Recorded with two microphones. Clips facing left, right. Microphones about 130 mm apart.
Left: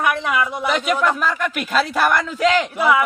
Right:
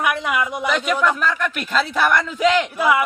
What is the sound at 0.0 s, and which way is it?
Speech, 15° right (ahead or behind).